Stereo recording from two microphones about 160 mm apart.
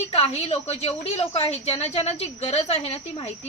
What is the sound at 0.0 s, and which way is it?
A woman's voice, 40° left (ahead or behind).